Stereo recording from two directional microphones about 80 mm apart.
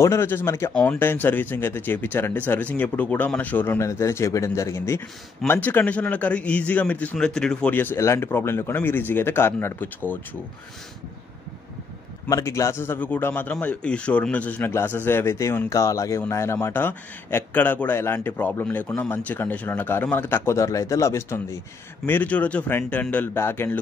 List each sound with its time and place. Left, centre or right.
0.0 s a man's voice: left; by 7.7 s centre
7.7 s a man's voice: left
12.3 s a man's voice: left; by 14.7 s centre
14.7 s a man's voice: left
22.0 s a man's voice: left
23.3 s a man's voice: left